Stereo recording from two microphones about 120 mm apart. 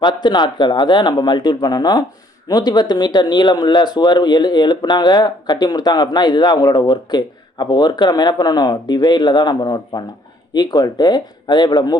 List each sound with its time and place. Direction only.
0.0 s speech: 35° left (ahead or behind)